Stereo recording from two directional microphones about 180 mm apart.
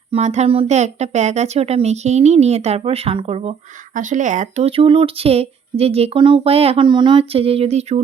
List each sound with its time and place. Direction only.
0.1 s speech: 40° right (ahead or behind)
3.9 s speech: 45° right (ahead or behind)